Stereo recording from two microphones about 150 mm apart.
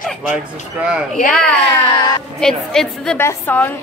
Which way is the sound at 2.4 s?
5° left (ahead or behind).